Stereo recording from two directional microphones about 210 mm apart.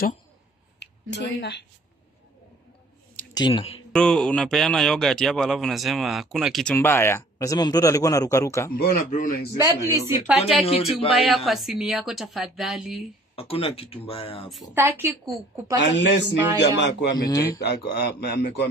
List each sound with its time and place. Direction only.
0.7 s a woman's voice: 55° left (ahead or behind)
3.3 s speech: 20° left (ahead or behind)
3.9 s a man's voice: 5° left (ahead or behind)
8.8 s a man's voice: 40° left (ahead or behind)
9.6 s a woman's voice: 15° right (ahead or behind)
10.4 s speech: 30° left (ahead or behind)
11.2 s a man's voice: centre (ahead or behind)
13.4 s speech: 25° left (ahead or behind)
14.5 s a man's voice: centre (ahead or behind)
14.8 s a woman's voice: 10° right (ahead or behind)
15.9 s speech: 55° left (ahead or behind)
17.1 s speech: 15° left (ahead or behind)
17.6 s a man's voice: 50° left (ahead or behind)